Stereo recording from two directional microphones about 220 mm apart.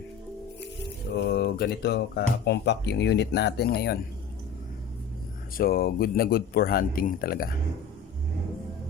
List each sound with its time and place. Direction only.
1.1 s speech: 45° left (ahead or behind)
5.5 s speech: 40° left (ahead or behind)